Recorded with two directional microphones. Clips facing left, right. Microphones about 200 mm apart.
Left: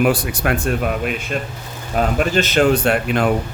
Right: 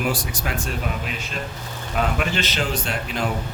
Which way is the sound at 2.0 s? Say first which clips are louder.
Left 6 dB; 45° left (ahead or behind).